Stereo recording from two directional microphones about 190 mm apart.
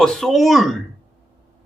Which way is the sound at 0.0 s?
Centre (ahead or behind).